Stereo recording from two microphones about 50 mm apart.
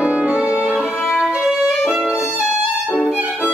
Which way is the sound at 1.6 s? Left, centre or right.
Centre.